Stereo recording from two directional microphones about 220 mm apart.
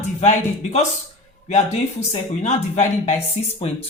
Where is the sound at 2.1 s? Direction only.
30° left (ahead or behind).